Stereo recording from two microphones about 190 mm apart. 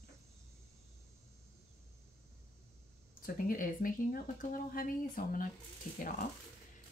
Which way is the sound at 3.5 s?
45° left (ahead or behind).